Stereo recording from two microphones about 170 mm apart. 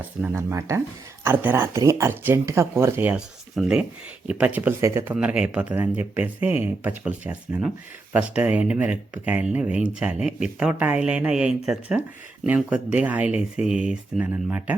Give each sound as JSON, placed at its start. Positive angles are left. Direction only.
{"t": 0.0, "sound": "speech", "side_deg": -10}